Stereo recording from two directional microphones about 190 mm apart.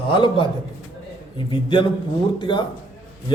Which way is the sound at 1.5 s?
25° left (ahead or behind).